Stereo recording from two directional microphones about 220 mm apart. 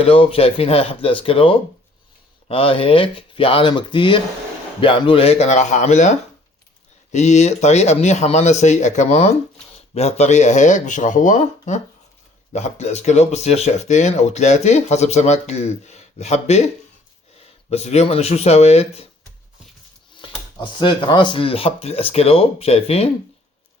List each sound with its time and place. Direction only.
0.0 s speech: 25° left (ahead or behind)
17.7 s speech: 30° left (ahead or behind)
20.2 s speech: 20° left (ahead or behind)